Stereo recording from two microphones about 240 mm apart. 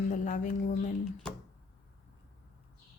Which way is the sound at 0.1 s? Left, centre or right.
Left.